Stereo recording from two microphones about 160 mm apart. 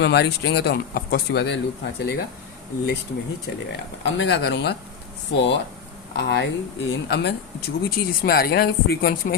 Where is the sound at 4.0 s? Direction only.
90° left.